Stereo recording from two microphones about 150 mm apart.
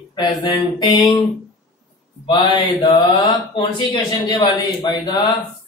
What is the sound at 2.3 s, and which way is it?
Speech, 30° left (ahead or behind).